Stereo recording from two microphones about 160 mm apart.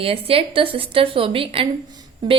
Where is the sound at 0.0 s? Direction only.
35° right (ahead or behind).